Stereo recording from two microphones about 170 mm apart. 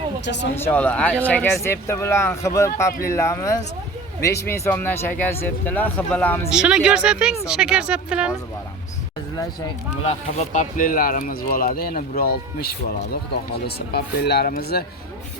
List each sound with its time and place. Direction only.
0.5 s speech: 10° left (ahead or behind)
6.5 s speech: 5° right (ahead or behind)
10.0 s speech: 35° left (ahead or behind); by 14.8 s 65° left (ahead or behind)